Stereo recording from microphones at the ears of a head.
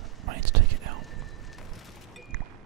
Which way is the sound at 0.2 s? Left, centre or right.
Right.